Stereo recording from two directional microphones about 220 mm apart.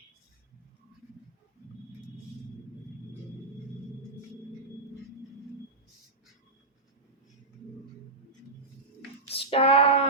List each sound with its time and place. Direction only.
9.3 s female singing: 25° left (ahead or behind)